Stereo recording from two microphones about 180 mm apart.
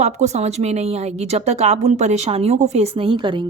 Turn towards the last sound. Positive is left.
turn(degrees=-30)  # may be behind; listen again after turning